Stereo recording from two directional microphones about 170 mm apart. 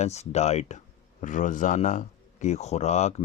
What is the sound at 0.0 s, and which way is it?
Speech, 40° left (ahead or behind).